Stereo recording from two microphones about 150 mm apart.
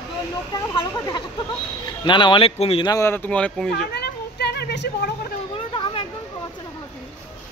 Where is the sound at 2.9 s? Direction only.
20° left (ahead or behind).